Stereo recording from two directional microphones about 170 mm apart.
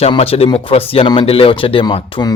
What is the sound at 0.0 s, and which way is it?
Speech, 35° left (ahead or behind).